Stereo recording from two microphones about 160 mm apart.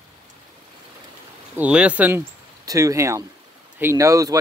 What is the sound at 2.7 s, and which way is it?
Speech, 20° right (ahead or behind).